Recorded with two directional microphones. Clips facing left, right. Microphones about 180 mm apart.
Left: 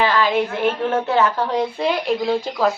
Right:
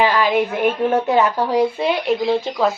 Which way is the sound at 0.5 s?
15° right (ahead or behind).